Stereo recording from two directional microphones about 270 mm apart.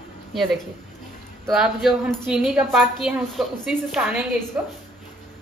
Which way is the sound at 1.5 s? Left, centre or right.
Centre.